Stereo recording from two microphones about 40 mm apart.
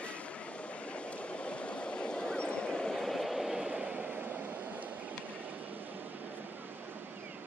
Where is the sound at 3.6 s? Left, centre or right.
Right.